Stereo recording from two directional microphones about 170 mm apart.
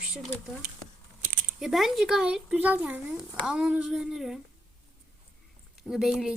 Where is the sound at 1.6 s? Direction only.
Centre (ahead or behind).